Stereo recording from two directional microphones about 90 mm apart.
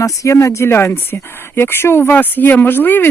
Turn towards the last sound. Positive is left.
turn(degrees=25)  # may be behind; listen again after turning